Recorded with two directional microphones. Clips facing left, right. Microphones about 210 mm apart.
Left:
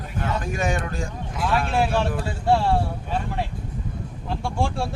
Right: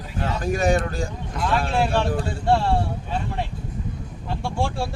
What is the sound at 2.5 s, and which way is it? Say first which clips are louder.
Speech: left 1 dB; centre (ahead or behind).